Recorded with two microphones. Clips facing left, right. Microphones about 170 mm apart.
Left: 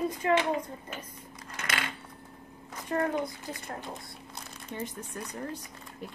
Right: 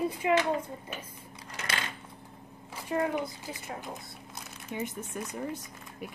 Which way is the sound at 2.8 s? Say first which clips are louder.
Even; 10° right (ahead or behind).